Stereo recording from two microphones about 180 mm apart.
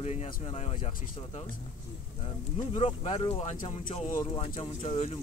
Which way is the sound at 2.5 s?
30° left (ahead or behind).